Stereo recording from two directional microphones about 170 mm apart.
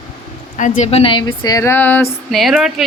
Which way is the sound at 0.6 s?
45° left (ahead or behind).